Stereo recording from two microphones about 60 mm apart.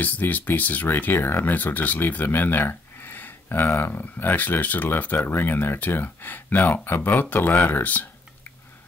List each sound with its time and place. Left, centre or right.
0.0 s speech: left